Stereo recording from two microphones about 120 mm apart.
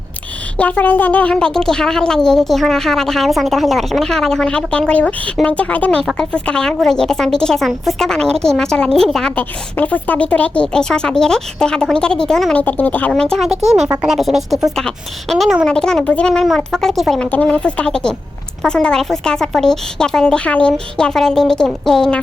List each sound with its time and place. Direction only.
0.5 s a woman's voice: 10° left (ahead or behind)
13.6 s speech: 65° right (ahead or behind)
14.0 s a woman's voice: centre (ahead or behind)
17.2 s a woman's voice: 10° left (ahead or behind)